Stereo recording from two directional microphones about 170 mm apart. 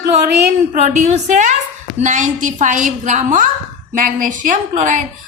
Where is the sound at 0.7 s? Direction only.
45° right (ahead or behind).